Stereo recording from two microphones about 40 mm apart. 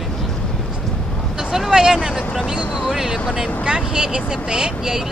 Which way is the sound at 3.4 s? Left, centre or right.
Centre.